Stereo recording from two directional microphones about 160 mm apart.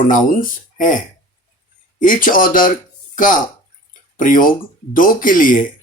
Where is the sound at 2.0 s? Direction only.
55° left (ahead or behind).